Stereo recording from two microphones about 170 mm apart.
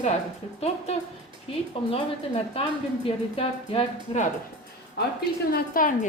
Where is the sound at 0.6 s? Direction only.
40° left (ahead or behind).